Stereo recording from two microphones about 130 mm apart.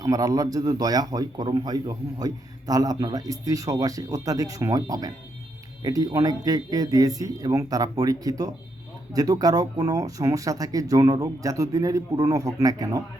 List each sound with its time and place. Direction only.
0.0 s speech: 25° right (ahead or behind)